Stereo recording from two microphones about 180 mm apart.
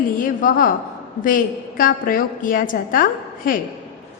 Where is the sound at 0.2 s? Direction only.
50° left (ahead or behind).